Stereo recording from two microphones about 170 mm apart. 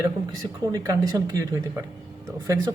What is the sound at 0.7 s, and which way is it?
Speech, 20° right (ahead or behind).